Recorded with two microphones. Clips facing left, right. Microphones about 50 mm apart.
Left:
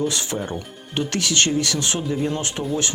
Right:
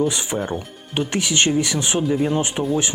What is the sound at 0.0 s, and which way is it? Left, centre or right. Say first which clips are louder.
Speech: right 3 dB; centre.